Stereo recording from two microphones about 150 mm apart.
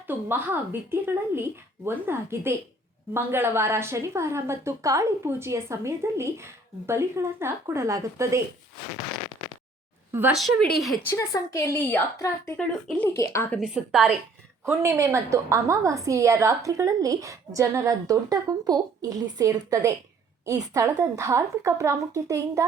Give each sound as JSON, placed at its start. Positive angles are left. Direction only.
{"t": 0.1, "sound": "speech", "side_deg": -15}
{"t": 10.1, "sound": "a woman's voice", "side_deg": -15}
{"t": 10.3, "sound": "a woman's voice", "side_deg": 0}
{"t": 11.1, "sound": "a woman's voice", "side_deg": 25}
{"t": 13.5, "sound": "a woman's voice", "side_deg": 0}
{"t": 14.6, "sound": "a woman's voice", "side_deg": -20}